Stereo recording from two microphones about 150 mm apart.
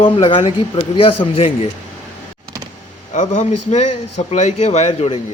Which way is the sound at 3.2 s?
50° left (ahead or behind).